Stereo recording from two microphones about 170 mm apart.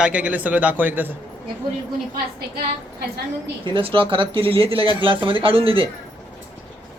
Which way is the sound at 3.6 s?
30° right (ahead or behind).